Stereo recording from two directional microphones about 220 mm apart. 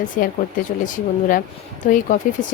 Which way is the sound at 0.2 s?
40° left (ahead or behind).